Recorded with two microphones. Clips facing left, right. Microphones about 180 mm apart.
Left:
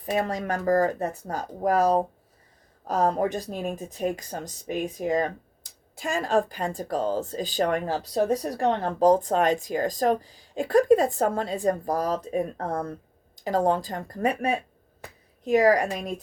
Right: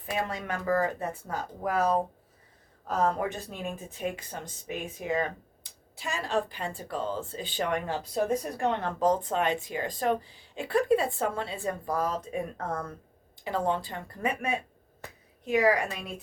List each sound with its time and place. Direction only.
0.0 s speech: 40° left (ahead or behind)